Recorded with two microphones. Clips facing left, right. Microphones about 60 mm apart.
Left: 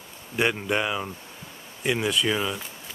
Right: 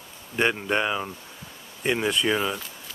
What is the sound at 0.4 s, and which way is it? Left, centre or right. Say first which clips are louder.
Speech: right 1 dB; centre.